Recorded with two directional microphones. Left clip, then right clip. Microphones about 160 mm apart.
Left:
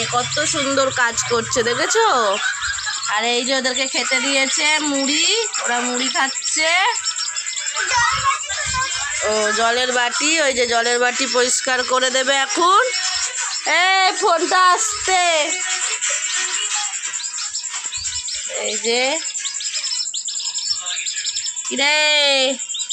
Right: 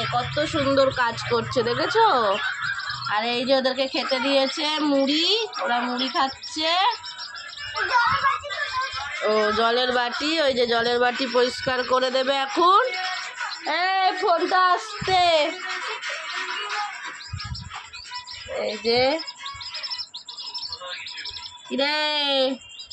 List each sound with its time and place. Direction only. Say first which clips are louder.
0.1 s speech: left 4 dB; 5° left (ahead or behind)
9.2 s speech: left 2 dB; centre (ahead or behind)
13.7 s speech: left 6 dB; 25° left (ahead or behind)
15.0 s speech: left 2 dB; 5° left (ahead or behind)
18.6 s speech: left 2 dB; 5° right (ahead or behind)
21.7 s speech: left 7 dB; 10° left (ahead or behind)